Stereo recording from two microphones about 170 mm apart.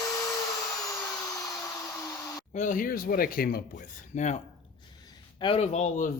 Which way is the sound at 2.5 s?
50° left (ahead or behind).